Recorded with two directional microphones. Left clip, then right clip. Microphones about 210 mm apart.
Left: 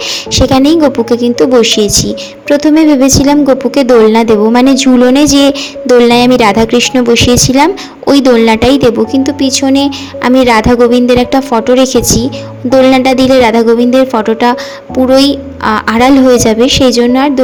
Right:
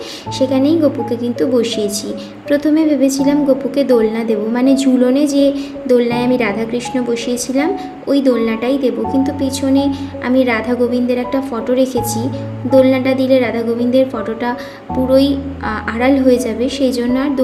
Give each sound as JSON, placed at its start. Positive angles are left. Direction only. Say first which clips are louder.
{"t": 0.3, "sound": "speech", "louder": "left 7 dB", "side_deg": 40}